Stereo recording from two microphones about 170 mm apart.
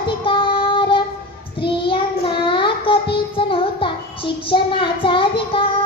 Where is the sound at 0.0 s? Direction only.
30° left (ahead or behind).